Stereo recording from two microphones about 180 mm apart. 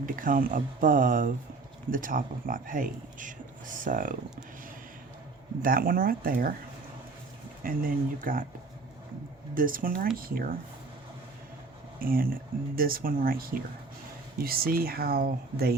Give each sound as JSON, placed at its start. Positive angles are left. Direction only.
{"t": 0.0, "sound": "speech", "side_deg": -50}
{"t": 5.6, "sound": "speech", "side_deg": -50}
{"t": 7.6, "sound": "speech", "side_deg": -50}
{"t": 9.6, "sound": "speech", "side_deg": -50}
{"t": 11.9, "sound": "speech", "side_deg": -55}